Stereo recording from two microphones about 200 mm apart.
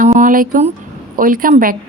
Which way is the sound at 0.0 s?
40° right (ahead or behind).